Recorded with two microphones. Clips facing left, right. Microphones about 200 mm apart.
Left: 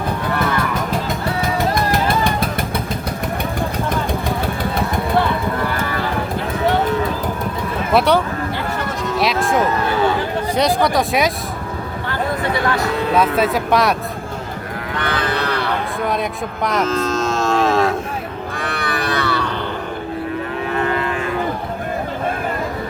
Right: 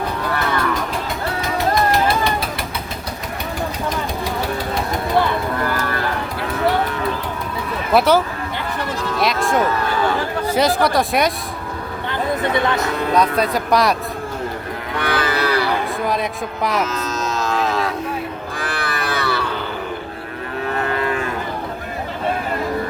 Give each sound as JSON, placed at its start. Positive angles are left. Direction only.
{"t": 7.9, "sound": "speech", "side_deg": 0}
{"t": 9.1, "sound": "sheep", "side_deg": 0}
{"t": 10.5, "sound": "speech", "side_deg": 0}
{"t": 12.4, "sound": "speech", "side_deg": -20}
{"t": 13.1, "sound": "speech", "side_deg": 5}
{"t": 14.9, "sound": "cattle", "side_deg": -10}
{"t": 17.1, "sound": "cattle", "side_deg": 30}
{"t": 17.6, "sound": "cattle", "side_deg": 50}
{"t": 18.5, "sound": "livestock", "side_deg": 0}